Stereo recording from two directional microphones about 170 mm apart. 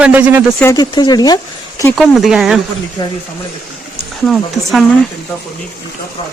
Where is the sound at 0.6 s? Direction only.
20° left (ahead or behind).